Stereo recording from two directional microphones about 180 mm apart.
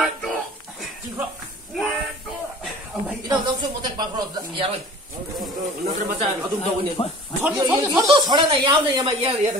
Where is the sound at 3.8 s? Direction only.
25° right (ahead or behind).